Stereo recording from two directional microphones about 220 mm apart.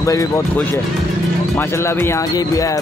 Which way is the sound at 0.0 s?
15° left (ahead or behind).